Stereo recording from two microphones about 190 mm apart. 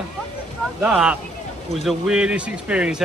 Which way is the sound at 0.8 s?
5° right (ahead or behind).